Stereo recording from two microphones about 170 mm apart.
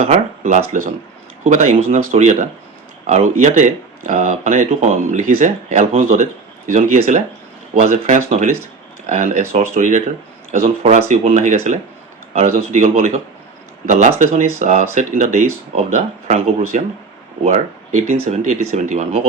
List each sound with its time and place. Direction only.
0.1 s speech: 40° right (ahead or behind)